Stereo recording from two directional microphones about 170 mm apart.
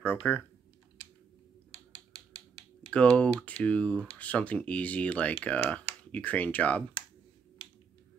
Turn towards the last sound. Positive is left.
turn(degrees=10)  # may be behind; listen again after turning